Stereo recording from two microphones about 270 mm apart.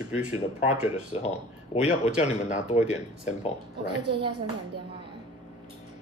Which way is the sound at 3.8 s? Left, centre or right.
Centre.